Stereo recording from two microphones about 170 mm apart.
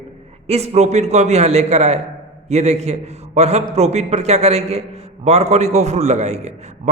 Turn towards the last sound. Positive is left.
turn(degrees=-40)  # may be behind; listen again after turning